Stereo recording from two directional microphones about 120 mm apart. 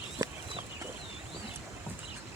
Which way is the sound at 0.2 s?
30° right (ahead or behind).